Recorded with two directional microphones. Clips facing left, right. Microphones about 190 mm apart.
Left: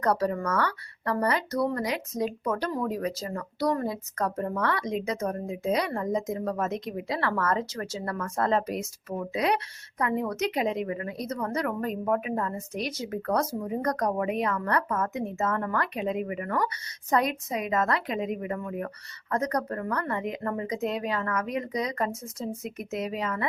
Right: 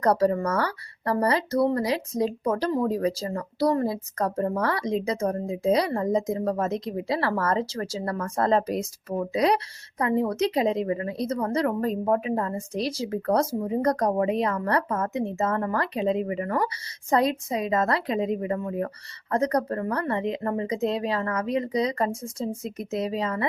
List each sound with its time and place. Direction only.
0.0 s speech: 35° right (ahead or behind)